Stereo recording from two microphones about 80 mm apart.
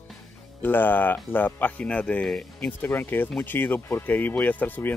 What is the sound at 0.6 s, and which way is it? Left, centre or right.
Speech, left.